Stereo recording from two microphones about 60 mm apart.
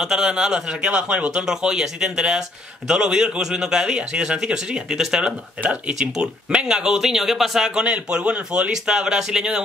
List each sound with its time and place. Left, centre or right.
0.0 s speech: centre
5.2 s speech: right